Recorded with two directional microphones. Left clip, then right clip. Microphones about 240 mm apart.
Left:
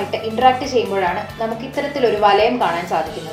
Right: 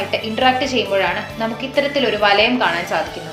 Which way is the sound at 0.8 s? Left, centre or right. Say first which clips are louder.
Left 2 dB; right.